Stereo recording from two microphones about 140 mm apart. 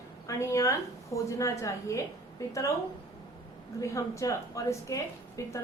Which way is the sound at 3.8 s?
20° left (ahead or behind).